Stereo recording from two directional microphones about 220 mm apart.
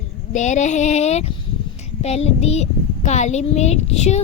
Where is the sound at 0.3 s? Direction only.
30° left (ahead or behind).